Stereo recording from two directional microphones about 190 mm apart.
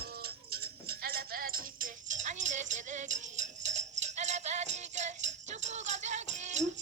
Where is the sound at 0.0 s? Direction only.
55° right (ahead or behind).